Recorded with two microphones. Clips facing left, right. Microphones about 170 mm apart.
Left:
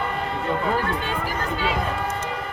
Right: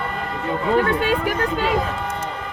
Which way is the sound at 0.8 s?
65° right (ahead or behind).